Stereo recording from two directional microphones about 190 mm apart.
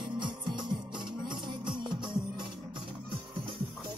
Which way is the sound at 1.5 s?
25° right (ahead or behind).